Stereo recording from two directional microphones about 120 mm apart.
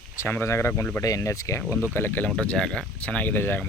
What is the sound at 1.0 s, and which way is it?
Speech, 25° left (ahead or behind).